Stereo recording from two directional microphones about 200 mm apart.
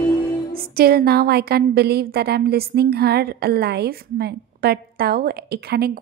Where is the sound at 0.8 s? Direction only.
50° right (ahead or behind).